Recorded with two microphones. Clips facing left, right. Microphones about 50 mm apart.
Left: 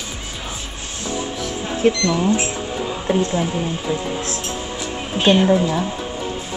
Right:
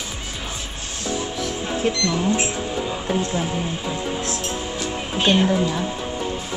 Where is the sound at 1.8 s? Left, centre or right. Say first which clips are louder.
Left 7 dB; left.